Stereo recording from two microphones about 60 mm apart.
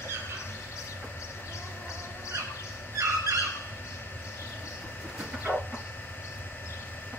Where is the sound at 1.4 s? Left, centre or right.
Left.